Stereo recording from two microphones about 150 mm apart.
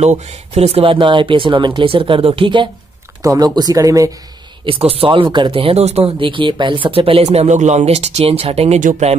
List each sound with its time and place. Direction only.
0.0 s speech: 45° right (ahead or behind); by 4.1 s 20° right (ahead or behind)
4.6 s speech: 40° right (ahead or behind)
8.7 s speech: 60° right (ahead or behind)